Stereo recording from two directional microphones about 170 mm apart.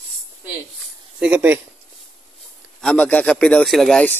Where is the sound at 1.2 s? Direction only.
10° right (ahead or behind).